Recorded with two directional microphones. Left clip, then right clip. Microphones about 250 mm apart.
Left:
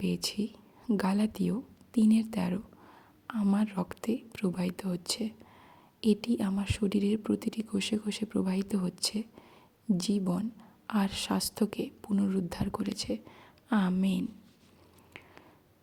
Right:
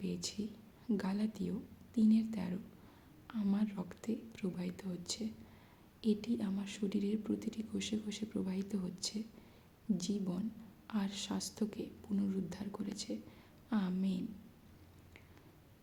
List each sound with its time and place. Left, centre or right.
0.0 s speech: left